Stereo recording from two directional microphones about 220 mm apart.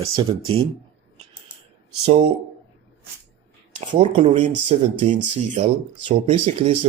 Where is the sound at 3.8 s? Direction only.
25° right (ahead or behind).